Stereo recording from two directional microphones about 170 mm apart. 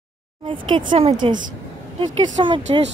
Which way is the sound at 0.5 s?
30° right (ahead or behind).